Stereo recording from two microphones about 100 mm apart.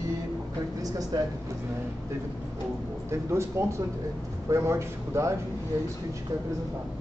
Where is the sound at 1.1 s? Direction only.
35° right (ahead or behind).